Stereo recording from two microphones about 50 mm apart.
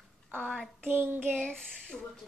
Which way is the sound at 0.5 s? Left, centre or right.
Centre.